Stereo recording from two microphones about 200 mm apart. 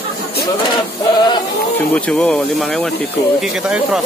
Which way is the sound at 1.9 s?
5° left (ahead or behind).